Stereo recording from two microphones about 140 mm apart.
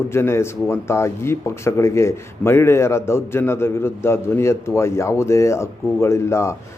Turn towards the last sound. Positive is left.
turn(degrees=20)  # may be behind; listen again after turning